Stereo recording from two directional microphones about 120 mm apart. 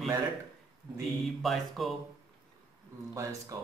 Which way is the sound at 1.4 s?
Centre (ahead or behind).